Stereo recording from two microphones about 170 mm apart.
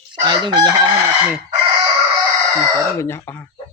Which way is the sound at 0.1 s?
25° right (ahead or behind).